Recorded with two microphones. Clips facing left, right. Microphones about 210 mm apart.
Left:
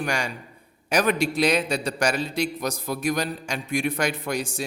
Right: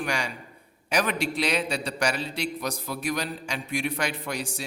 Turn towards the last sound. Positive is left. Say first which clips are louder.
# left 4 dB
turn(degrees=45)  # may be behind; listen again after turning